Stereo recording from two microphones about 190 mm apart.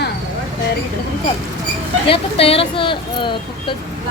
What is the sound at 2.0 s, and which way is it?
Speech, 30° left (ahead or behind).